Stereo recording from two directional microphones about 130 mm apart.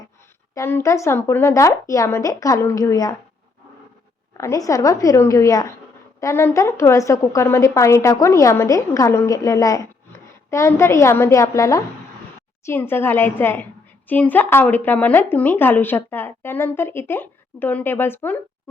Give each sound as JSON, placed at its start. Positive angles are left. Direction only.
{"t": 0.5, "sound": "a woman's voice", "side_deg": 20}
{"t": 4.4, "sound": "a woman's voice", "side_deg": 25}